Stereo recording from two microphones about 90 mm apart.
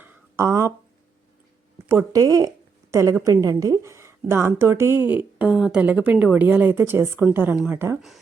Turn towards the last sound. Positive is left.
turn(degrees=-25)  # may be behind; listen again after turning